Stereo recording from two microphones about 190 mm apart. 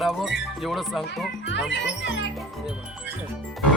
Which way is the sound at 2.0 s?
70° left (ahead or behind).